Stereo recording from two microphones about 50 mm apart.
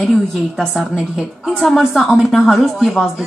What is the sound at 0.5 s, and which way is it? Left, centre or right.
A woman's voice, centre.